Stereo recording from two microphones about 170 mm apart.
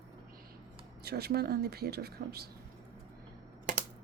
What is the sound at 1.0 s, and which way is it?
Speech, 70° right (ahead or behind).